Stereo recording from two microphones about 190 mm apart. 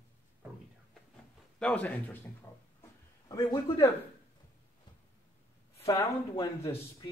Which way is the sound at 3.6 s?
15° left (ahead or behind).